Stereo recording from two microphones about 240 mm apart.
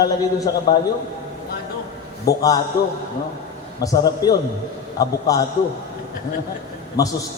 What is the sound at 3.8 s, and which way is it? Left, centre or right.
Speech, centre.